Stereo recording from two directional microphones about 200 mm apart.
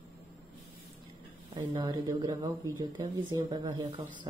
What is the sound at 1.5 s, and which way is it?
Speech, 20° right (ahead or behind).